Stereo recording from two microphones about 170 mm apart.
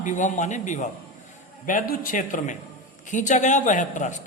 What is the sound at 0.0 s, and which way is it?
A woman's voice, 45° left (ahead or behind).